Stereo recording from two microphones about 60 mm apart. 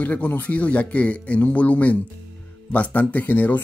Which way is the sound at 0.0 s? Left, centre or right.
Left.